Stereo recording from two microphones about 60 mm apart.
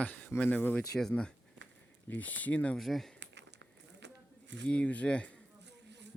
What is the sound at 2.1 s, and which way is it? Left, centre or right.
Speech, left.